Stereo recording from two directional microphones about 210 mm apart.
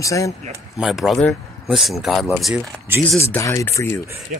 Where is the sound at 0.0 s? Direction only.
15° left (ahead or behind).